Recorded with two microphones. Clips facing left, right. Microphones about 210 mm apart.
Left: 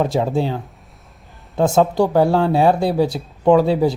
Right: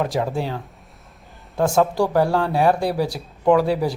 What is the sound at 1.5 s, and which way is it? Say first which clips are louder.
Speech: left 3 dB; 25° left (ahead or behind).